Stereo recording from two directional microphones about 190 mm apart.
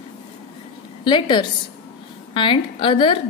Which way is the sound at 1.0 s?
25° left (ahead or behind).